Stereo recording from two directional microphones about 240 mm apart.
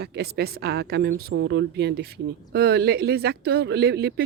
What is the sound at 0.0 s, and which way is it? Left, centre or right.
A woman's voice, right.